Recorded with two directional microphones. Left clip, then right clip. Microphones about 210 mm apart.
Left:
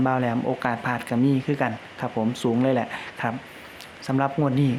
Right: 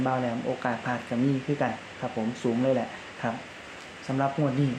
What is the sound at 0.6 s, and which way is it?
Speech, 40° left (ahead or behind).